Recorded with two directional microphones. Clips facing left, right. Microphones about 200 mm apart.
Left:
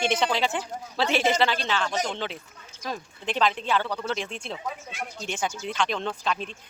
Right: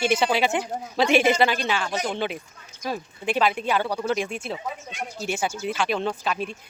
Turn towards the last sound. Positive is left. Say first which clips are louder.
# right 3 dB
turn(degrees=-10)  # may be behind; listen again after turning